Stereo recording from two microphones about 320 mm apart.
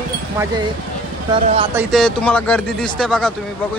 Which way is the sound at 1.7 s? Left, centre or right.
Centre.